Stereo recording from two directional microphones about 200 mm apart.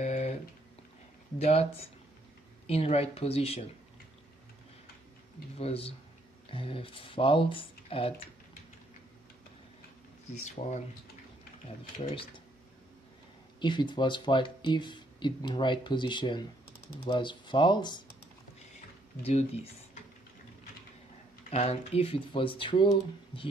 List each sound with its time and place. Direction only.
0.0 s a sound: 35° left (ahead or behind)
1.4 s speech: 30° left (ahead or behind)
5.6 s speech: 30° left (ahead or behind)
10.3 s speech: 35° left (ahead or behind)
13.6 s speech: 20° left (ahead or behind)
19.2 s speech: 30° left (ahead or behind)
21.5 s speech: 30° left (ahead or behind)